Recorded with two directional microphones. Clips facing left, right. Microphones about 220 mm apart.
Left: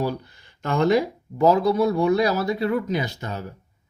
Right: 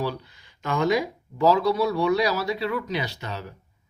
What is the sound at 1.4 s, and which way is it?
Speech, 40° left (ahead or behind).